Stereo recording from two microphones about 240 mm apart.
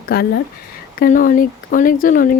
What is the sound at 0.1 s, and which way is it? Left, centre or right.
Speech, left.